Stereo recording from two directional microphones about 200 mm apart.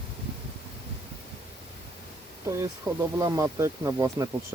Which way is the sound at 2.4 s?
15° right (ahead or behind).